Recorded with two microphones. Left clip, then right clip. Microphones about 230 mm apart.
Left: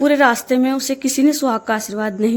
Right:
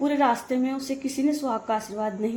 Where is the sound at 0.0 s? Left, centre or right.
Left.